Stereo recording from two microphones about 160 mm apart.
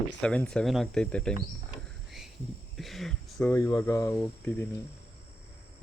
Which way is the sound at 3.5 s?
20° left (ahead or behind).